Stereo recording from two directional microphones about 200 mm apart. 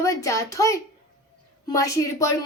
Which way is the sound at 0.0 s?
15° left (ahead or behind).